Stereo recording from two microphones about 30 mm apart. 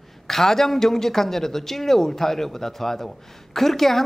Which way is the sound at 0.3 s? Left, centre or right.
Centre.